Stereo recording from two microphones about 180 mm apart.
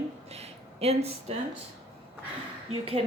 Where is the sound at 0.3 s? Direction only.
35° right (ahead or behind).